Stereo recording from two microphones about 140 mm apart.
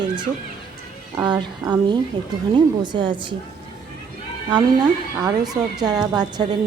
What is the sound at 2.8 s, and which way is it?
Speech, 35° right (ahead or behind).